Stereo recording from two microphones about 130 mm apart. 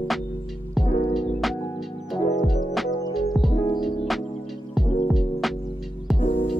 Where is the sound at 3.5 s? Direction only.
35° left (ahead or behind).